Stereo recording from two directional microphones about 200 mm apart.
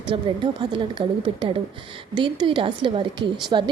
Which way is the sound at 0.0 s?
25° right (ahead or behind).